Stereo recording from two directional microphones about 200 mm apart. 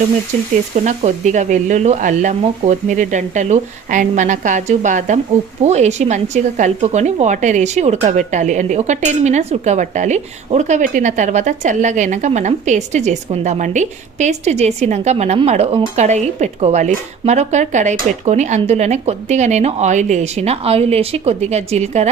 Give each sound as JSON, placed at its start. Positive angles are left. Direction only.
{"t": 0.9, "sound": "speech", "side_deg": -35}